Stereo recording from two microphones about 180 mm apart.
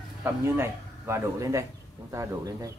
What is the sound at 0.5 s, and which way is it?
Speech, 15° right (ahead or behind).